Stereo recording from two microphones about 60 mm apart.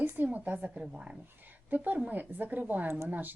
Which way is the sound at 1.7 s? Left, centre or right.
Right.